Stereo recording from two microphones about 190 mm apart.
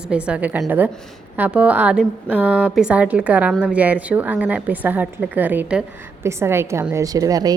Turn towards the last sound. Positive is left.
turn(degrees=-20)  # may be behind; listen again after turning